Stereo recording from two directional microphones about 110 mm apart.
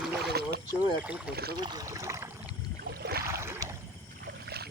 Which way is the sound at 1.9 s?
30° right (ahead or behind).